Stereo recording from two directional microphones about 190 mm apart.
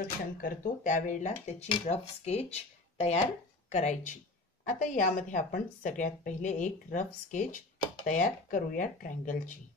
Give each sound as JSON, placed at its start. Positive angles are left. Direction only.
{"t": 0.4, "sound": "a woman's voice", "side_deg": 45}